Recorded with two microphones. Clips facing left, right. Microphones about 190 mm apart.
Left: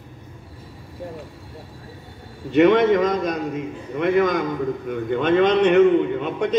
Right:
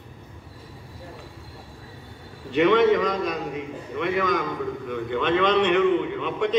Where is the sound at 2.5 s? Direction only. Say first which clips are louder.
Left 3 dB; 50° left (ahead or behind).